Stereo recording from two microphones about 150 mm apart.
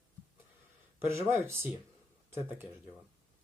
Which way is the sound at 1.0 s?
15° right (ahead or behind).